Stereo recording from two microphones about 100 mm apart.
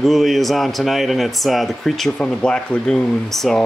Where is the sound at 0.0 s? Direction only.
Centre (ahead or behind).